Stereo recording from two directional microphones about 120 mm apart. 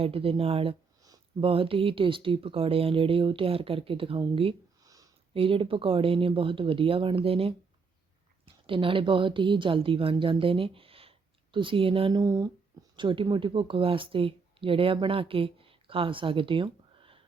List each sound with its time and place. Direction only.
0.0 s speech: 50° right (ahead or behind)
4.8 s a sound: 30° right (ahead or behind)
5.3 s speech: 50° right (ahead or behind)
12.2 s speech: 25° right (ahead or behind)
13.0 s speech: 40° right (ahead or behind)